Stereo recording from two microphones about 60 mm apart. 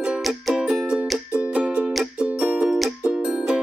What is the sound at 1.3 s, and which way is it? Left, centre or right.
Music, centre.